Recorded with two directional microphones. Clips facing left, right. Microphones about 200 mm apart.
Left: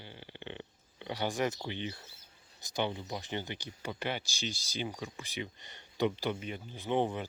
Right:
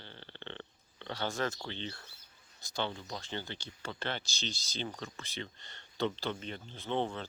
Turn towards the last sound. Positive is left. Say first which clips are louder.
# left 3 dB
turn(degrees=15)  # may be behind; listen again after turning